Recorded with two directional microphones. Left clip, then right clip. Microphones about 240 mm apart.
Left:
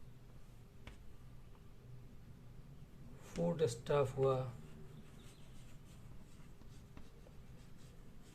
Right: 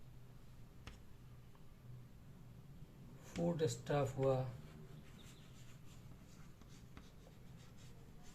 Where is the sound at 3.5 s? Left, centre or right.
Left.